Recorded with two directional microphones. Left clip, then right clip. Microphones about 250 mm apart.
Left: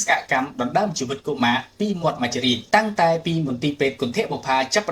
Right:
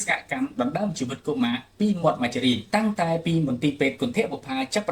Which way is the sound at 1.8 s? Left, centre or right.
Left.